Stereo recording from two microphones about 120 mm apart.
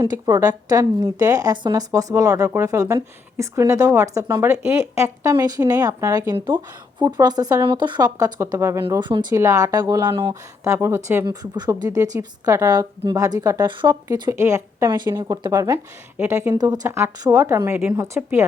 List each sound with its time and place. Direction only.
0.1 s speech: 30° right (ahead or behind)
9.0 s speech: 40° right (ahead or behind)
9.3 s speech: 25° right (ahead or behind)
11.3 s speech: 35° right (ahead or behind)